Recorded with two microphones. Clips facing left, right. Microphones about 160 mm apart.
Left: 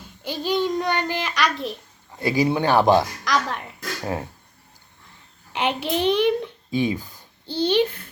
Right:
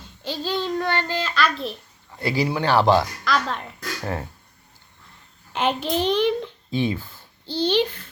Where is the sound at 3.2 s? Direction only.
15° left (ahead or behind).